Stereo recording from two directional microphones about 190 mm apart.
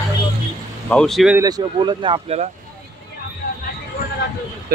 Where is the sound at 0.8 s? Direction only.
5° left (ahead or behind).